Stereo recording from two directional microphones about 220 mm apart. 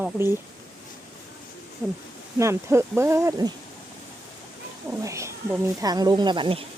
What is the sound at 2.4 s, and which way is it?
Speech, 10° right (ahead or behind).